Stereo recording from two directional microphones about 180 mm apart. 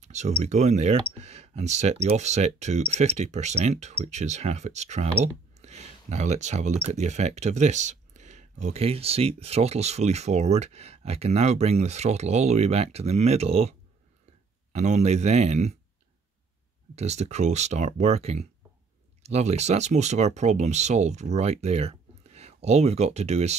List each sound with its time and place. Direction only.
0.0 s a sound: 40° right (ahead or behind)
0.4 s speech: 40° right (ahead or behind)
16.9 s speech: 40° right (ahead or behind)